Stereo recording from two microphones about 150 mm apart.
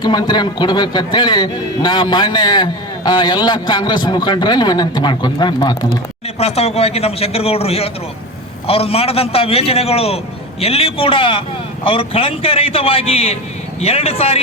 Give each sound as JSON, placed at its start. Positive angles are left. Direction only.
{"t": 0.0, "sound": "a man's voice", "side_deg": 30}
{"t": 6.4, "sound": "a man's voice", "side_deg": 45}